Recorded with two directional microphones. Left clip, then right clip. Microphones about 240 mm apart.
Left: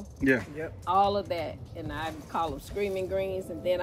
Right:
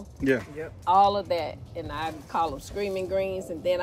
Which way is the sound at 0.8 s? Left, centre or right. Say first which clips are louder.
Right 5 dB; right.